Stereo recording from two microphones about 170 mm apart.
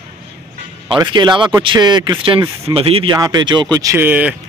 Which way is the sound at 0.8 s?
25° right (ahead or behind).